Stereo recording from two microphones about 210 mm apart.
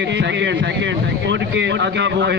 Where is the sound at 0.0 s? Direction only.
55° right (ahead or behind).